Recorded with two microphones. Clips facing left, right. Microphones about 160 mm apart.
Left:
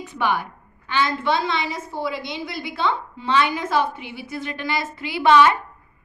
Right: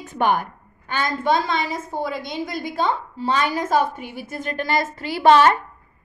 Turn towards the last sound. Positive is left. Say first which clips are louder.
# right 1 dB
turn(degrees=-40)  # may be behind; listen again after turning